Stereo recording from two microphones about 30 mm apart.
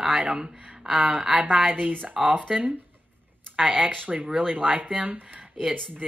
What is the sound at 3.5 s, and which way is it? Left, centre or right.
Speech, right.